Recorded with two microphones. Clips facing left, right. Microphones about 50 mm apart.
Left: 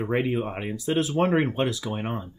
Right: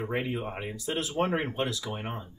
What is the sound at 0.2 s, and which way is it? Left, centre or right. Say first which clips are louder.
Speech: left 6 dB; left.